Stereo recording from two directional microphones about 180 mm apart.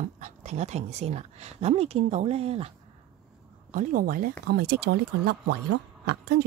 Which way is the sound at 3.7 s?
50° right (ahead or behind).